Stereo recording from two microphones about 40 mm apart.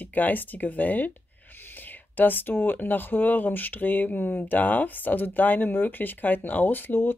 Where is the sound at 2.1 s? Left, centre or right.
Left.